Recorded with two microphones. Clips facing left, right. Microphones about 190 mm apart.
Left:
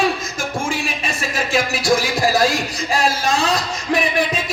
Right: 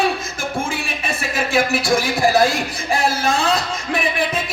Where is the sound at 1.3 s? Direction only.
55° right (ahead or behind).